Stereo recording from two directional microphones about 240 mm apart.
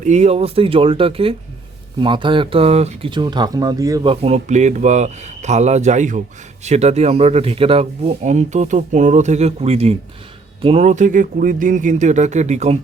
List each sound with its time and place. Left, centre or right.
0.0 s speech: right